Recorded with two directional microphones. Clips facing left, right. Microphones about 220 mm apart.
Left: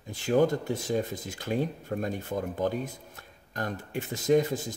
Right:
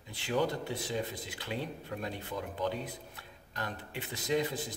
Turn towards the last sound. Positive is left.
turn(degrees=45)  # may be behind; listen again after turning